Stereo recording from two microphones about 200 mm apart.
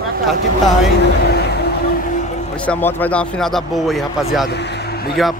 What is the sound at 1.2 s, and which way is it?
Music, 55° left (ahead or behind).